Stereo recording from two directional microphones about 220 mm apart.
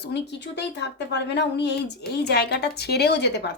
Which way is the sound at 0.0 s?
50° left (ahead or behind).